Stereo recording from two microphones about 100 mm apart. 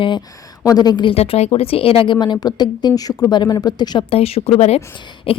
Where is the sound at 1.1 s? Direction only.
90° left; by 4.0 s 45° left (ahead or behind).